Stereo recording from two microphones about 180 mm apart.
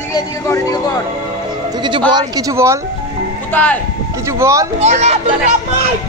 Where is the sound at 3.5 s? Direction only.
10° left (ahead or behind).